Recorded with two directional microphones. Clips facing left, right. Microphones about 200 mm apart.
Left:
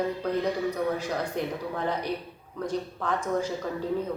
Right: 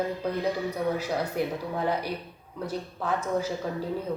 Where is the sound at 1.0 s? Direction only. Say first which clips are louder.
Right 1 dB; 10° right (ahead or behind).